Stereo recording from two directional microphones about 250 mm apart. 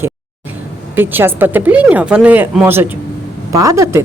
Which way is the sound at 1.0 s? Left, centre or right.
Centre.